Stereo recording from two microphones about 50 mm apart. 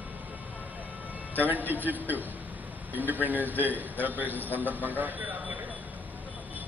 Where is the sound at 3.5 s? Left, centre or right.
Left.